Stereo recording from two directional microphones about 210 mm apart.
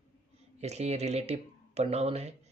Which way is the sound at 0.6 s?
30° right (ahead or behind).